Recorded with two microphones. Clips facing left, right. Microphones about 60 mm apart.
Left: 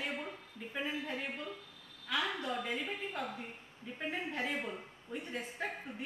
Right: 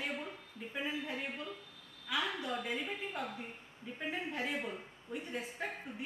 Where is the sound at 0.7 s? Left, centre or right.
Centre.